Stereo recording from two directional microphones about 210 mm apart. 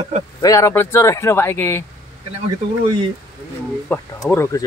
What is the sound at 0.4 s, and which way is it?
Speech, 15° left (ahead or behind).